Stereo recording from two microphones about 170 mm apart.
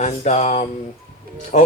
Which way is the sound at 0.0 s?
45° left (ahead or behind).